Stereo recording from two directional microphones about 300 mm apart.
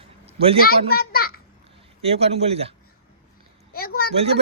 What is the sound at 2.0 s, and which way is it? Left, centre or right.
Speech, centre.